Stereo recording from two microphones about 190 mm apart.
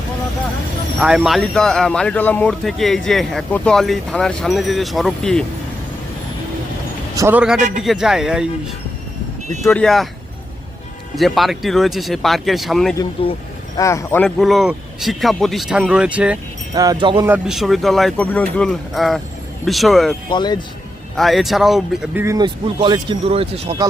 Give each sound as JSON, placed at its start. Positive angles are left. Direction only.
{"t": 0.9, "sound": "speech", "side_deg": -5}
{"t": 7.2, "sound": "a man's voice", "side_deg": -10}
{"t": 9.6, "sound": "speech", "side_deg": 5}
{"t": 11.2, "sound": "speech", "side_deg": 0}
{"t": 13.2, "sound": "speech", "side_deg": 30}
{"t": 13.7, "sound": "speech", "side_deg": 15}
{"t": 16.7, "sound": "speech", "side_deg": -20}
{"t": 17.2, "sound": "speech", "side_deg": -5}
{"t": 20.3, "sound": "speech", "side_deg": 25}
{"t": 21.2, "sound": "speech", "side_deg": 0}